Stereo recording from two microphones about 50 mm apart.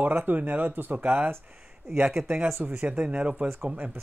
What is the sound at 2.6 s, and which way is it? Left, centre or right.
Speech, right.